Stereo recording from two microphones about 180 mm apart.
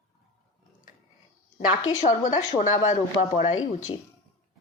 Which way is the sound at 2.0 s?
40° left (ahead or behind).